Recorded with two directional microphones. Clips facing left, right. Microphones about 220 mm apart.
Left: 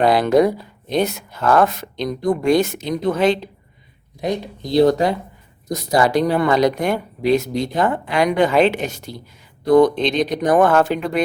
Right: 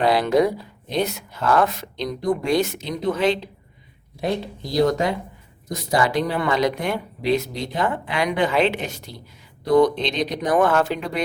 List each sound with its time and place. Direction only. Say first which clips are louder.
0.0 s speech: left 4 dB; 50° left (ahead or behind)
4.2 s speech: left 2 dB; 20° left (ahead or behind); by 11.2 s 50° left (ahead or behind)